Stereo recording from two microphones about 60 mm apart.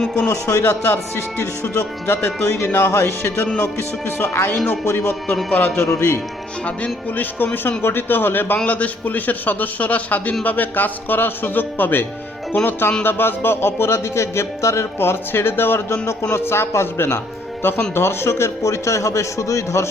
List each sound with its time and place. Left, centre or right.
0.3 s speech: left
5.5 s a man's voice: left
5.7 s speech: left
6.7 s speech: left
8.5 s a man's voice: left